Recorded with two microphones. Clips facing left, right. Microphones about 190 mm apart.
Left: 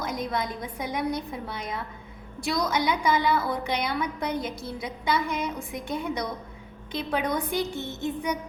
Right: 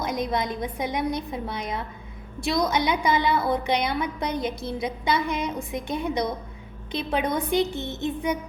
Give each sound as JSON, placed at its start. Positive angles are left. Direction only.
{"t": 0.0, "sound": "a woman's voice", "side_deg": -20}